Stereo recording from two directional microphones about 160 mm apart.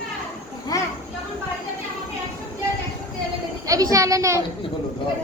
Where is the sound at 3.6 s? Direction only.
20° right (ahead or behind).